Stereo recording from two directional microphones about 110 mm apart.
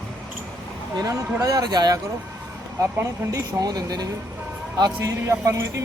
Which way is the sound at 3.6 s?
35° right (ahead or behind).